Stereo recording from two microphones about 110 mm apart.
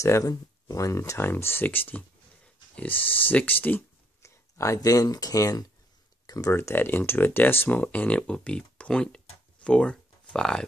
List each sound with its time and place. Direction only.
0.0 s speech: 30° left (ahead or behind); by 10.6 s 5° left (ahead or behind)